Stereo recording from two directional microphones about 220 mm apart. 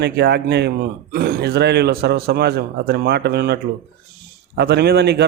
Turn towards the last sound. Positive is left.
turn(degrees=-50)  # may be behind; listen again after turning